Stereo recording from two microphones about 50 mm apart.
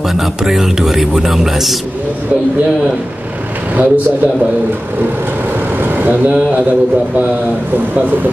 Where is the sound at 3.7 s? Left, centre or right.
Right.